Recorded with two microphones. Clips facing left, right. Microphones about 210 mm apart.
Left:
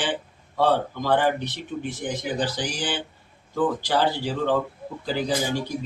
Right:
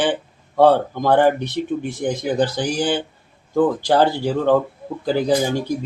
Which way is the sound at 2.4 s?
55° right (ahead or behind).